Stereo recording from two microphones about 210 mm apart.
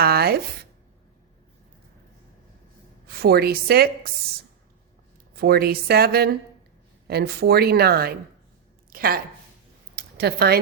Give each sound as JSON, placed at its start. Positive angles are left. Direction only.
{"t": 0.0, "sound": "speech", "side_deg": -45}
{"t": 3.2, "sound": "speech", "side_deg": -50}
{"t": 5.4, "sound": "a woman's voice", "side_deg": -45}
{"t": 9.9, "sound": "a sound", "side_deg": -50}